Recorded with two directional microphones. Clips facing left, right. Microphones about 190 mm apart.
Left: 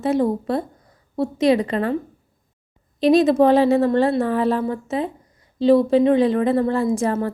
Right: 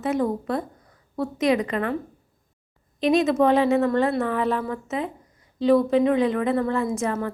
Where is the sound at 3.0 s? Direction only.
35° left (ahead or behind).